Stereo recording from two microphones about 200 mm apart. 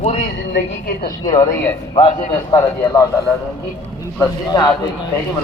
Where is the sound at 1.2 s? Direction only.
15° left (ahead or behind).